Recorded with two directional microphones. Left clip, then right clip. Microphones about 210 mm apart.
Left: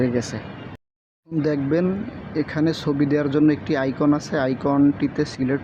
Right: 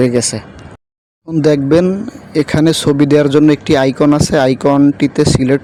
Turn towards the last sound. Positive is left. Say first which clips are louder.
# right 12 dB
turn(degrees=-45)  # may be behind; listen again after turning